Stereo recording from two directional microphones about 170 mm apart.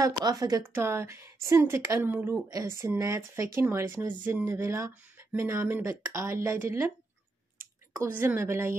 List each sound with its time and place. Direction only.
0.0 s speech: 20° right (ahead or behind)